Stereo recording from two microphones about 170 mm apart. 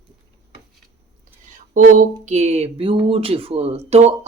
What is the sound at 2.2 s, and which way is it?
Speech, 45° right (ahead or behind).